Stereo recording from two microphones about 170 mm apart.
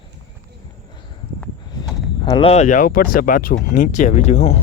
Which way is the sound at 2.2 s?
30° left (ahead or behind).